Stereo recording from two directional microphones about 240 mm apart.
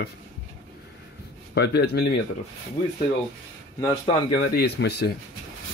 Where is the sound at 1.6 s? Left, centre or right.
Left.